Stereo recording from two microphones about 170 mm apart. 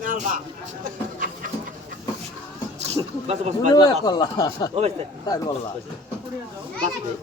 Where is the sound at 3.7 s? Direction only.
25° left (ahead or behind).